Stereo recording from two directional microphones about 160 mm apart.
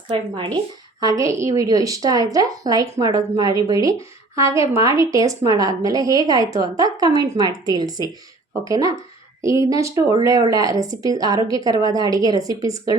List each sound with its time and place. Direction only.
0.1 s speech: 30° right (ahead or behind)
1.0 s a woman's voice: 20° right (ahead or behind)